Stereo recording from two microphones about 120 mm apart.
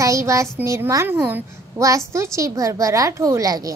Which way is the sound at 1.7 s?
25° right (ahead or behind).